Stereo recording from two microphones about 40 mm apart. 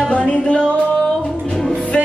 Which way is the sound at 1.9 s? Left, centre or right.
Left.